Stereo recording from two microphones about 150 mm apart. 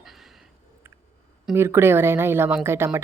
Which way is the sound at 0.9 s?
15° right (ahead or behind).